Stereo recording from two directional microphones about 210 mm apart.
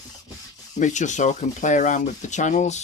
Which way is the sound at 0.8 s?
35° left (ahead or behind).